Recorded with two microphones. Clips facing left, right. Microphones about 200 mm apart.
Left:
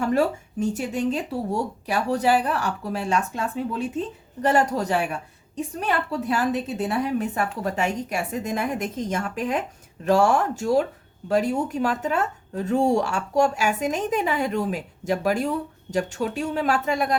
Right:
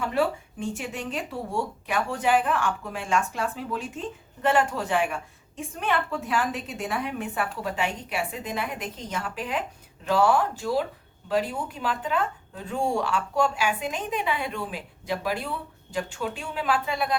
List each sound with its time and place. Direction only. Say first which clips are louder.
0.0 s a woman's voice: left 4 dB; 45° left (ahead or behind)